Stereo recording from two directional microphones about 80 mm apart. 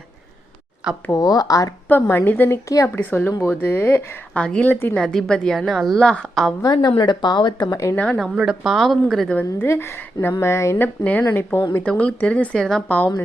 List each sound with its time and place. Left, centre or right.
1.1 s speech: left
1.9 s speech: left
2.5 s speech: left
2.9 s speech: left
4.4 s speech: centre
4.7 s speech: left
4.9 s a woman's voice: centre
6.7 s speech: left
7.9 s speech: centre
8.4 s a woman's voice: centre
9.3 s speech: centre
9.6 s speech: left
10.8 s speech: left
11.9 s speech: centre